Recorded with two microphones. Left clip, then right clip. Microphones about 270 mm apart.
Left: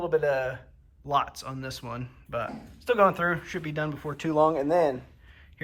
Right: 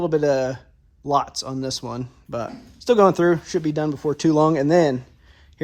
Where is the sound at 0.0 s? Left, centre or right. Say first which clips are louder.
Right 6 dB; right.